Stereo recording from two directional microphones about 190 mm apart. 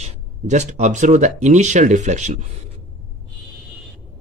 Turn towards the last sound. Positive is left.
turn(degrees=-40)  # may be behind; listen again after turning